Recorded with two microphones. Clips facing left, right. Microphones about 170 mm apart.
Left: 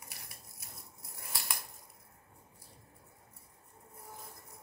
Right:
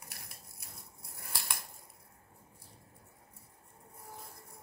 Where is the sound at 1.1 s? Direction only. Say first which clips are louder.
Even; centre (ahead or behind).